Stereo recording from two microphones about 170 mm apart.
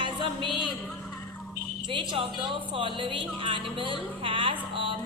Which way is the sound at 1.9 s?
30° right (ahead or behind).